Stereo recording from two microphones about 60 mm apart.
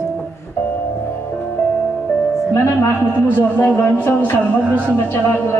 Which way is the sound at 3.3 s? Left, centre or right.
Left.